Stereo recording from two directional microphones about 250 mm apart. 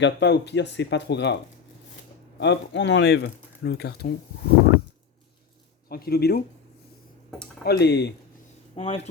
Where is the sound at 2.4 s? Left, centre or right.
Left.